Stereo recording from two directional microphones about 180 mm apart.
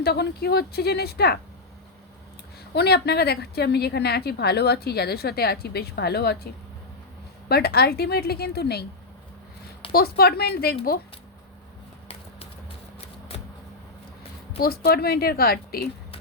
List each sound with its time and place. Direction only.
0.0 s a woman's voice: 60° left (ahead or behind)
2.7 s a woman's voice: 65° left (ahead or behind)
9.9 s a woman's voice: 60° left (ahead or behind)
14.8 s a woman's voice: 60° left (ahead or behind)